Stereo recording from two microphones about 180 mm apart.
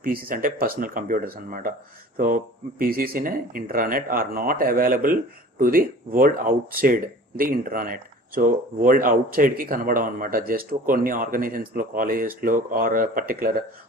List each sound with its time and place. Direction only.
0.0 s speech: 55° right (ahead or behind)